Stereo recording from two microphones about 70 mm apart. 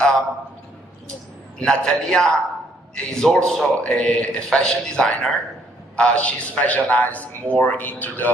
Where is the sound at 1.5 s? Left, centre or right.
Centre.